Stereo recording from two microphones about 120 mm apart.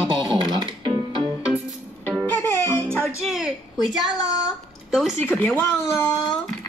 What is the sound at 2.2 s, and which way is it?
Music, 15° left (ahead or behind).